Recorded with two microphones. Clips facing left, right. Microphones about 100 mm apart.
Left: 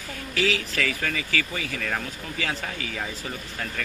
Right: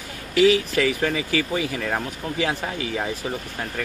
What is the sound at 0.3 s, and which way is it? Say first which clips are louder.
Speech: right 9 dB; 15° right (ahead or behind).